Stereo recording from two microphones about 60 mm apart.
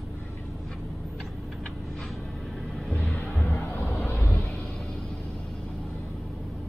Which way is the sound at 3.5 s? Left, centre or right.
Left.